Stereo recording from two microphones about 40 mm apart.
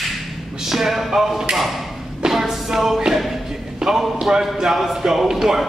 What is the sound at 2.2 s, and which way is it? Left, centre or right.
Music, centre.